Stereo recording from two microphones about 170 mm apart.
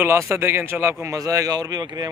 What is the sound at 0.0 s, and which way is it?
A man's voice, 15° right (ahead or behind).